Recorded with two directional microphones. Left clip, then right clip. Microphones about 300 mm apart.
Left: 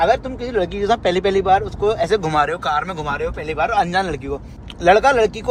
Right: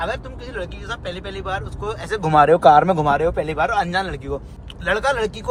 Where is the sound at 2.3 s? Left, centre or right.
Centre.